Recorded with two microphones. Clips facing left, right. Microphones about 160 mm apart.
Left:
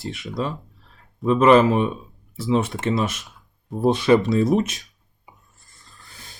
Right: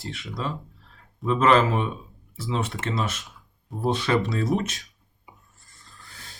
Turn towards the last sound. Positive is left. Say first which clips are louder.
# left 6 dB
turn(degrees=15)  # may be behind; listen again after turning